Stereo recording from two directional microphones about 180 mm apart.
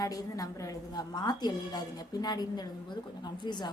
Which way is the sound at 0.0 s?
20° left (ahead or behind).